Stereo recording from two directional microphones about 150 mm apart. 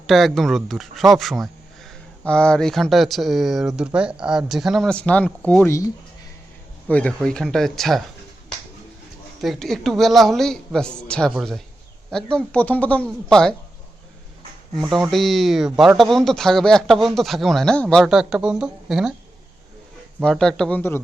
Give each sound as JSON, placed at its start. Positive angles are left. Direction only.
{"t": 0.1, "sound": "a man's voice", "side_deg": 0}
{"t": 5.6, "sound": "speech", "side_deg": 20}
{"t": 6.8, "sound": "a man's voice", "side_deg": 10}
{"t": 9.4, "sound": "a man's voice", "side_deg": 0}
{"t": 14.8, "sound": "a man's voice", "side_deg": 0}
{"t": 20.2, "sound": "a man's voice", "side_deg": 5}